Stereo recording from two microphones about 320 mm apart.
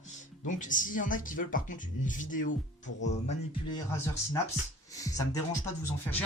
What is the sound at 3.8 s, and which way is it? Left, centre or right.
Speech, centre.